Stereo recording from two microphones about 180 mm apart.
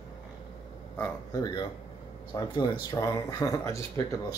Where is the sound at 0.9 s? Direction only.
20° left (ahead or behind).